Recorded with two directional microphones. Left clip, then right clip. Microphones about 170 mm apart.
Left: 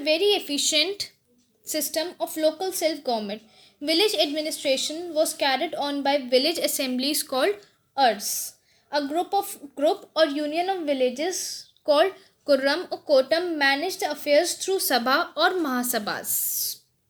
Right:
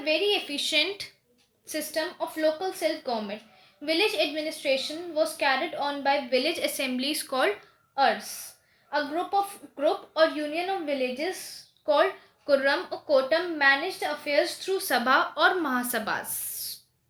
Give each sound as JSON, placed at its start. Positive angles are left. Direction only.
{"t": 0.0, "sound": "a woman's voice", "side_deg": 50}
{"t": 12.5, "sound": "a woman's voice", "side_deg": 45}